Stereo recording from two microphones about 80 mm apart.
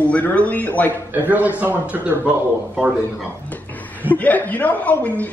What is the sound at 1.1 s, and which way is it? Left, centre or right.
A man's voice, right.